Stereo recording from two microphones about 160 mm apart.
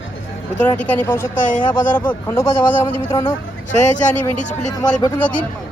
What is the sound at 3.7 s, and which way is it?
Speech, 50° left (ahead or behind).